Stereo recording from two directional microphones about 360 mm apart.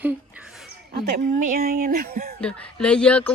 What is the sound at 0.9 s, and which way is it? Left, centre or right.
A woman's voice, right.